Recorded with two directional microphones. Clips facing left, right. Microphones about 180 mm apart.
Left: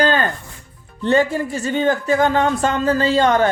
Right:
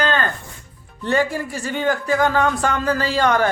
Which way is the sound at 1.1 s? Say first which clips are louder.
Left 4 dB; 25° left (ahead or behind).